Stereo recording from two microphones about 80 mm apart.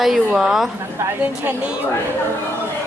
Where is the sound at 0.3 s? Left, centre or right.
Centre.